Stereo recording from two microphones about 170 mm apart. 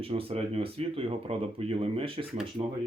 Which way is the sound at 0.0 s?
35° right (ahead or behind).